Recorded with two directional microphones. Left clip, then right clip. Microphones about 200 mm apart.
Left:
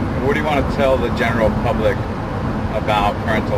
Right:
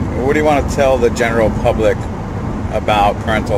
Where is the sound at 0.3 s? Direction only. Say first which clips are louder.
Right 5 dB; 55° right (ahead or behind).